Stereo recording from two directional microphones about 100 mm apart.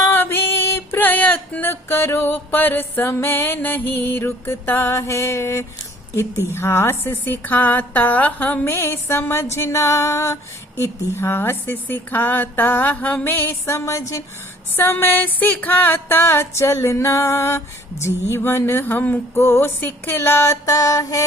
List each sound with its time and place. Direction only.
0.0 s music: 20° left (ahead or behind)
6.1 s a woman's voice: 25° left (ahead or behind)
14.8 s a woman's voice: 20° left (ahead or behind)